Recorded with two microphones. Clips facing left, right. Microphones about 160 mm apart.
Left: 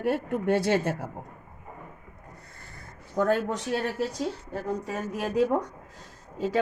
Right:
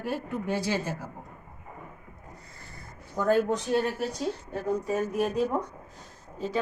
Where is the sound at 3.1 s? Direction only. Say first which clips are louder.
Right 1 dB; 70° left (ahead or behind).